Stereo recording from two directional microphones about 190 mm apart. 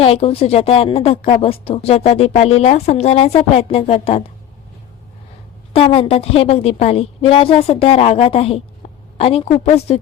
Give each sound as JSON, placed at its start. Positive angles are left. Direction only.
{"t": 0.0, "sound": "a woman's voice", "side_deg": 30}
{"t": 5.7, "sound": "a woman's voice", "side_deg": 30}